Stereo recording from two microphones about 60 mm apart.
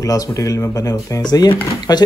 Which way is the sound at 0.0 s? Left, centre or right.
Left.